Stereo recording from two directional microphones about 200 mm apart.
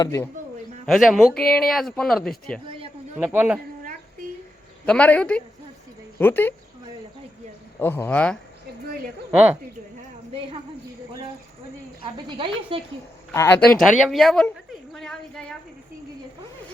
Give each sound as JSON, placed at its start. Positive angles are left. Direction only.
{"t": 0.0, "sound": "speech", "side_deg": 15}
{"t": 0.9, "sound": "speech", "side_deg": 0}
{"t": 2.6, "sound": "a sound", "side_deg": -25}
{"t": 3.2, "sound": "speech", "side_deg": -5}
{"t": 4.9, "sound": "speech", "side_deg": 5}
{"t": 7.8, "sound": "speech", "side_deg": 10}
{"t": 9.3, "sound": "speech", "side_deg": -5}
{"t": 12.1, "sound": "a woman's voice", "side_deg": -25}
{"t": 13.3, "sound": "a woman's voice", "side_deg": 10}